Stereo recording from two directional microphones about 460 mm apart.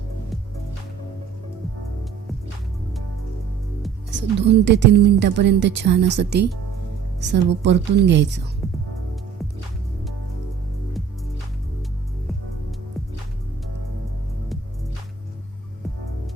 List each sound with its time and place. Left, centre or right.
4.1 s a woman's voice: right